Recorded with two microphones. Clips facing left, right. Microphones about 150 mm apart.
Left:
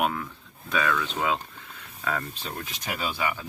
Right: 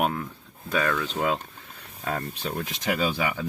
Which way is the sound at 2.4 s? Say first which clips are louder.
Right 6 dB; 70° right (ahead or behind).